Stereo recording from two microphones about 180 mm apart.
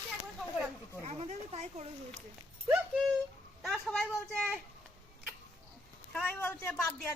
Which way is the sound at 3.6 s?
Centre (ahead or behind).